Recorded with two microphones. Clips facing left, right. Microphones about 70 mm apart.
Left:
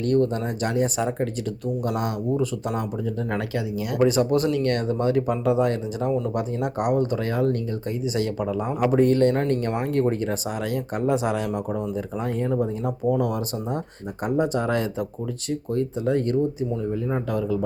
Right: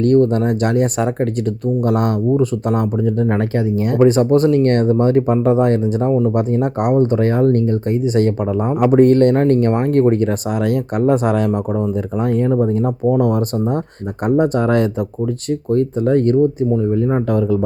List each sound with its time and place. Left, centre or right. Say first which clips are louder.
0.0 s speech: right 8 dB; right